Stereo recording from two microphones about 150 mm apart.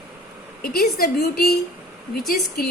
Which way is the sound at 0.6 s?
90° left.